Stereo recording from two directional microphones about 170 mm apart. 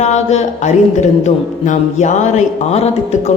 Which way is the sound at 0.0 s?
40° left (ahead or behind).